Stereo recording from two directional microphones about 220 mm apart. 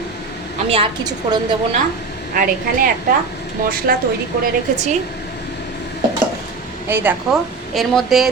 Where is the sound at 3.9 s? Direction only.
40° right (ahead or behind).